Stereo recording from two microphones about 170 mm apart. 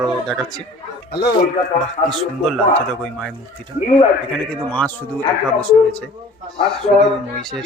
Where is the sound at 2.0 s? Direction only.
Centre (ahead or behind).